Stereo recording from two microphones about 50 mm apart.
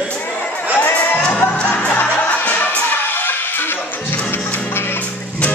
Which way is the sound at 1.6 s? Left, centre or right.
Left.